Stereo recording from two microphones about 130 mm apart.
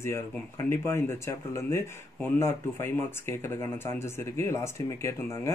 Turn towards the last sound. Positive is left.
turn(degrees=20)  # may be behind; listen again after turning